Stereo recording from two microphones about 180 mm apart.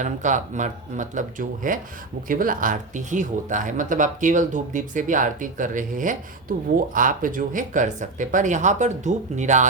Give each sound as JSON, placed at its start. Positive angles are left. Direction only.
{"t": 0.0, "sound": "speech", "side_deg": -45}